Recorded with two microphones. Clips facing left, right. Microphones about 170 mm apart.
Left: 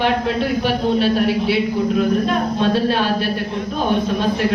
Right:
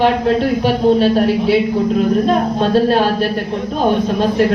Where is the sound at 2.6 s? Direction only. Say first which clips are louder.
Right 4 dB; 40° right (ahead or behind).